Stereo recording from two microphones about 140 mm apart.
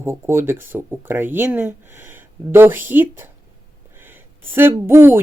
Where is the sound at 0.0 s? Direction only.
15° right (ahead or behind).